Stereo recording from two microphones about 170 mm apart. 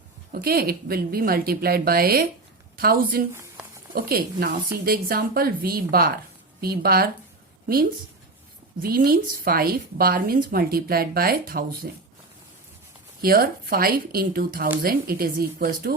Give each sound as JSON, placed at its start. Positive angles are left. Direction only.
{"t": 0.3, "sound": "speech", "side_deg": -60}
{"t": 8.8, "sound": "speech", "side_deg": -60}
{"t": 13.2, "sound": "speech", "side_deg": -60}